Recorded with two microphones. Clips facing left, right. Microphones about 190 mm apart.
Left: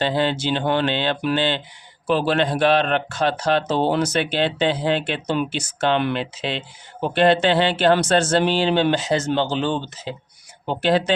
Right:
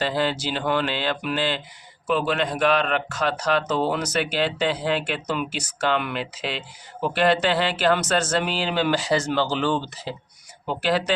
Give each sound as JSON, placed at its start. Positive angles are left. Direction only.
{"t": 0.0, "sound": "speech", "side_deg": 25}